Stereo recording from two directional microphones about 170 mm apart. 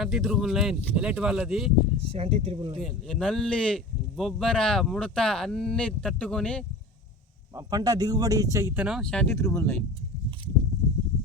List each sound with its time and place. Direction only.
0.0 s speech: centre (ahead or behind)
2.0 s speech: 35° right (ahead or behind)
2.8 s speech: 5° left (ahead or behind)
7.5 s speech: 20° right (ahead or behind); by 9.7 s 15° left (ahead or behind)